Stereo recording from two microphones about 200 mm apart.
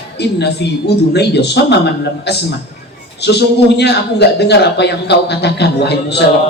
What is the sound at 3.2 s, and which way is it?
A man's voice, 55° left (ahead or behind).